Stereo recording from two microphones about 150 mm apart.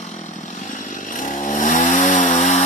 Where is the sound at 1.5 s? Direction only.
60° left (ahead or behind).